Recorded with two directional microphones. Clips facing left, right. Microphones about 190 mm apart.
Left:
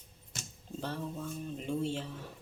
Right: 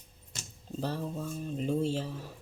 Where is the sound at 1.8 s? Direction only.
40° right (ahead or behind).